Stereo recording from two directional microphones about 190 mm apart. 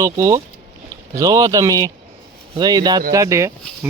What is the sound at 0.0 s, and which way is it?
A man's voice, 15° right (ahead or behind).